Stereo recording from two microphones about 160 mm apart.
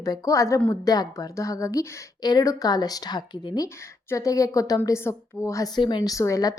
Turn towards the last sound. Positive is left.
turn(degrees=20)  # may be behind; listen again after turning